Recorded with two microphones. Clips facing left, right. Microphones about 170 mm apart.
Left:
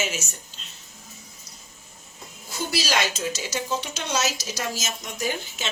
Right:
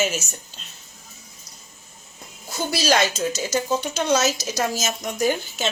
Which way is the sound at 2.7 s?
45° right (ahead or behind).